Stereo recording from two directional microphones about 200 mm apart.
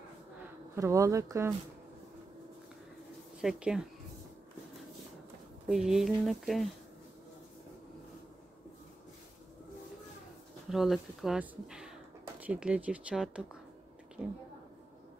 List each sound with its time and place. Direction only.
0.7 s speech: 15° right (ahead or behind)
3.3 s speech: 5° right (ahead or behind)
5.7 s speech: centre (ahead or behind)
10.7 s speech: centre (ahead or behind)